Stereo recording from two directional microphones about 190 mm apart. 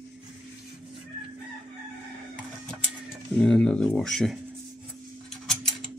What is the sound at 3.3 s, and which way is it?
Speech, 5° left (ahead or behind).